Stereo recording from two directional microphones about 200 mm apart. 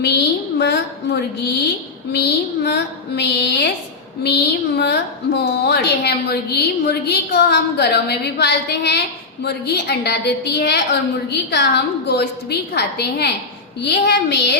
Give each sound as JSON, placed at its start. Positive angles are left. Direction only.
{"t": 0.6, "sound": "a woman's voice", "side_deg": 55}